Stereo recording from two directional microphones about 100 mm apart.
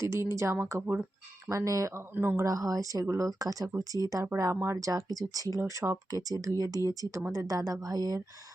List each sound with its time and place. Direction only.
0.0 s speech: 30° right (ahead or behind)
1.5 s speech: 35° right (ahead or behind)
2.4 s speech: 35° right (ahead or behind)